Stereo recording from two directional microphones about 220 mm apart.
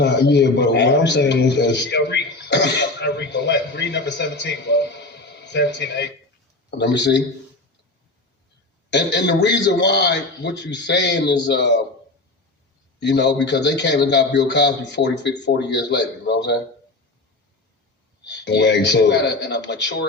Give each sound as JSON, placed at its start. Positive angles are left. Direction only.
{"t": 0.0, "sound": "a man's voice", "side_deg": 50}
{"t": 8.9, "sound": "a man's voice", "side_deg": 50}
{"t": 13.0, "sound": "a man's voice", "side_deg": 50}
{"t": 18.3, "sound": "a man's voice", "side_deg": 50}